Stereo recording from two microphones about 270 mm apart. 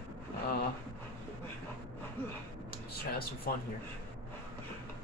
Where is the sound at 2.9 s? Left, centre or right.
Left.